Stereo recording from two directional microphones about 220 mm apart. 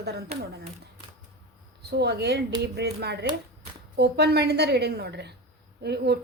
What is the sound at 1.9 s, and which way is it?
A woman's voice, 50° right (ahead or behind).